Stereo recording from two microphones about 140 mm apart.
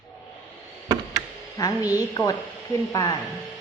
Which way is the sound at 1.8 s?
25° left (ahead or behind).